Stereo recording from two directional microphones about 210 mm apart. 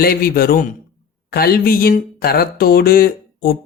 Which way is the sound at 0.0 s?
45° left (ahead or behind).